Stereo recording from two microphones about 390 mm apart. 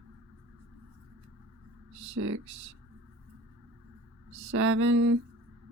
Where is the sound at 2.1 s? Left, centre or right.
Right.